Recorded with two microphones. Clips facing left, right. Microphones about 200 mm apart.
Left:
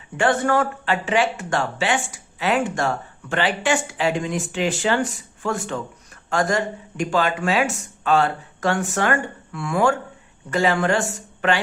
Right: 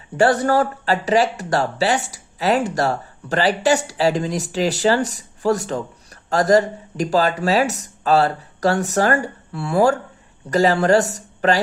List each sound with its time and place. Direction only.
0.2 s speech: 35° right (ahead or behind)